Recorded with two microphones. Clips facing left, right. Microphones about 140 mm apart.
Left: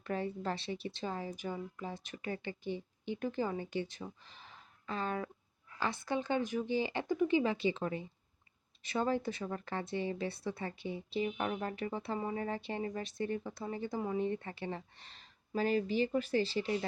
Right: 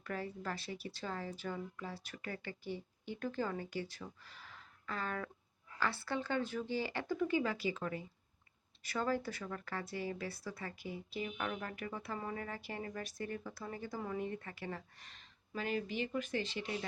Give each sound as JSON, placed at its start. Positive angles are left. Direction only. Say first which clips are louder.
{"t": 0.0, "sound": "a woman's voice", "louder": "left 5 dB", "side_deg": 25}